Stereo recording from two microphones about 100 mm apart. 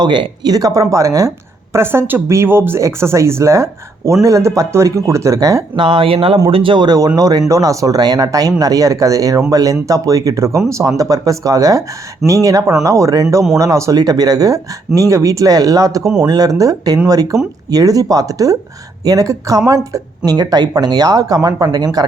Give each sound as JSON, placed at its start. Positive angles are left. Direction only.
{"t": 0.0, "sound": "speech", "side_deg": -45}
{"t": 5.7, "sound": "speech", "side_deg": -55}